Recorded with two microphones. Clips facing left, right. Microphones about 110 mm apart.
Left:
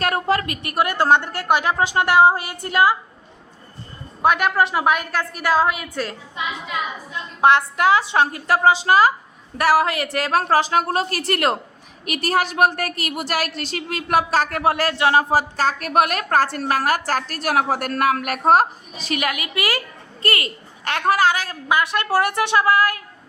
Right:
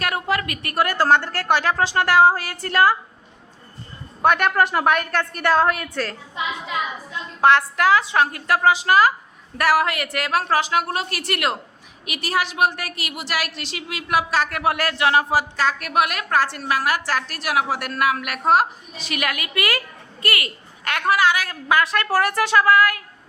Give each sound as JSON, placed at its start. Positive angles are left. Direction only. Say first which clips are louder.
{"t": 0.0, "sound": "a woman's voice", "louder": "left 3 dB", "side_deg": 35}
{"t": 4.2, "sound": "a woman's voice", "louder": "even", "side_deg": 5}
{"t": 7.4, "sound": "a woman's voice", "louder": "left 1 dB", "side_deg": 20}
{"t": 19.1, "sound": "a woman's voice", "louder": "left 2 dB", "side_deg": 25}
{"t": 21.7, "sound": "a woman's voice", "louder": "even", "side_deg": 20}